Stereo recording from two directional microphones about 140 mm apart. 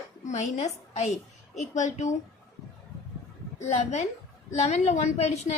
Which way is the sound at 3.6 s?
55° left (ahead or behind).